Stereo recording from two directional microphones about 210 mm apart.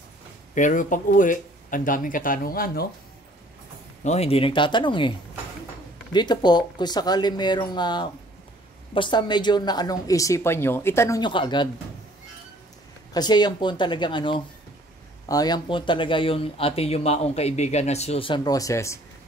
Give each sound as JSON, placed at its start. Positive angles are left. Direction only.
{"t": 0.6, "sound": "speech", "side_deg": 40}
{"t": 4.0, "sound": "speech", "side_deg": 30}
{"t": 6.1, "sound": "speech", "side_deg": 20}
{"t": 13.1, "sound": "speech", "side_deg": 20}